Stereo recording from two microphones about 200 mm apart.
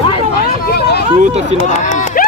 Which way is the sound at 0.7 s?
50° left (ahead or behind).